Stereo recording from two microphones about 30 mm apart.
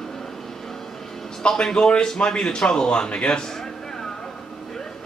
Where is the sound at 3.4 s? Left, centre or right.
Centre.